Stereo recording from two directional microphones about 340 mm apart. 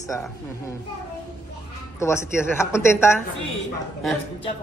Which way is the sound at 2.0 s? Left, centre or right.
Centre.